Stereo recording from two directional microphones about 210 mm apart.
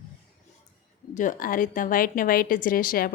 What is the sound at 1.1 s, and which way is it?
A woman's voice, 35° left (ahead or behind).